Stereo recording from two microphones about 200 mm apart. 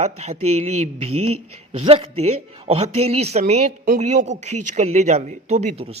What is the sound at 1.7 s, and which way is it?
Speech, 30° right (ahead or behind).